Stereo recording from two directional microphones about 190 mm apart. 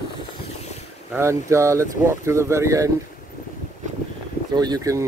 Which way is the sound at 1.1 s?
15° right (ahead or behind).